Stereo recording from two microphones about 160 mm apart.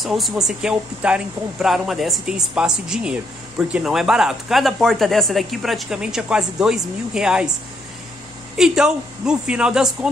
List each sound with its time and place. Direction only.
0.0 s speech: centre (ahead or behind)
8.5 s speech: 5° right (ahead or behind)